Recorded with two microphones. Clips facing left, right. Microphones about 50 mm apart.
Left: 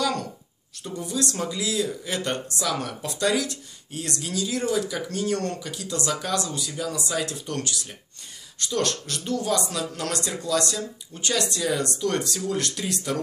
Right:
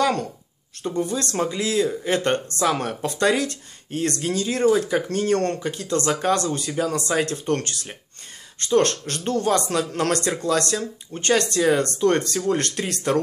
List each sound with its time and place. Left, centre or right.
0.8 s a man's voice: right